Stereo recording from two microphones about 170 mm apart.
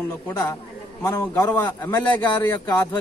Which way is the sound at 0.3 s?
20° left (ahead or behind).